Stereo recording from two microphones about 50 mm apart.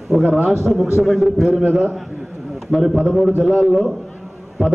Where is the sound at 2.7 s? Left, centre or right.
Centre.